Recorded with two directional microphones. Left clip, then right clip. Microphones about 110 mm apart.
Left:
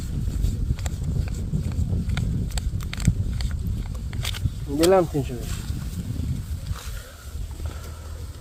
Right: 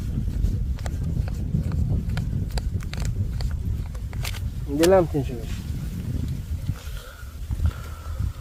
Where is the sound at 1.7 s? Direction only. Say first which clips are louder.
Even; 45° left (ahead or behind).